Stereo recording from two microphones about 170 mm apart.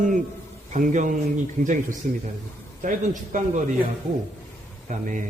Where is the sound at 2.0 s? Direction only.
60° right (ahead or behind).